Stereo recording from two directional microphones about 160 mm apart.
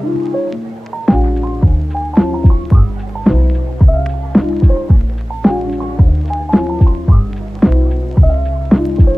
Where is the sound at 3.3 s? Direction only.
Centre (ahead or behind).